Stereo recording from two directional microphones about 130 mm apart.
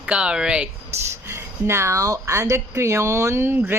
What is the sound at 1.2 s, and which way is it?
Speech, 20° right (ahead or behind).